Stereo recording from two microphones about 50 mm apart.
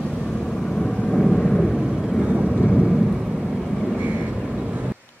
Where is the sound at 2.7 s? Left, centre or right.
Centre.